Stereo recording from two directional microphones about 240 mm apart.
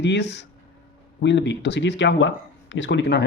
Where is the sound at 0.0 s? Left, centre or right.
Left.